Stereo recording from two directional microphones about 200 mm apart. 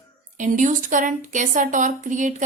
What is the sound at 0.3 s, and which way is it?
A woman's voice, 40° right (ahead or behind).